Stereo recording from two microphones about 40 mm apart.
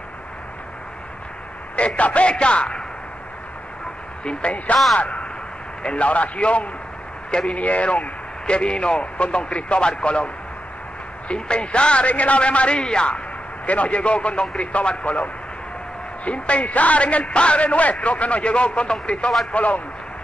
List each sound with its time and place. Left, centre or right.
2.0 s a man's voice: left
4.2 s speech: left
4.9 s a man's voice: left
7.2 s speech: centre
7.5 s a man's voice: left
13.7 s a man's voice: left
16.3 s a man's voice: left